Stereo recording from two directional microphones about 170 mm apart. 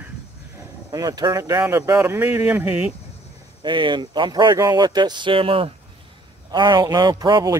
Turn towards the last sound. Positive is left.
turn(degrees=-25)  # may be behind; listen again after turning